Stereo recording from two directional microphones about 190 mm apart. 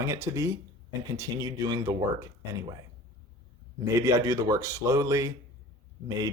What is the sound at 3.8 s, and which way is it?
Speech, 15° right (ahead or behind).